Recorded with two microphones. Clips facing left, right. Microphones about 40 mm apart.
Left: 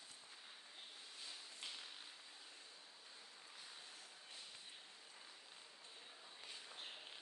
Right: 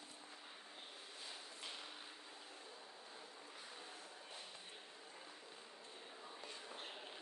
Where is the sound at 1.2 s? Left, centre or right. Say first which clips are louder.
Right 1 dB; centre.